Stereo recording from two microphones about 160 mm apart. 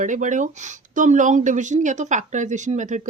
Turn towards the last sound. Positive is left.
turn(degrees=-50)  # may be behind; listen again after turning